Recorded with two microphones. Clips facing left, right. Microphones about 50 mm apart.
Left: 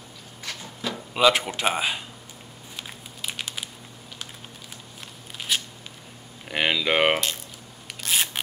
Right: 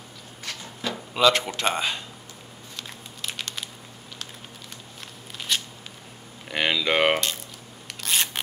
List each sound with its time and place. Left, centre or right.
0.4 s a sound: centre
1.6 s speech: centre
2.7 s crumpling: centre
5.5 s a sound: centre
6.5 s speech: centre
8.0 s scissors: centre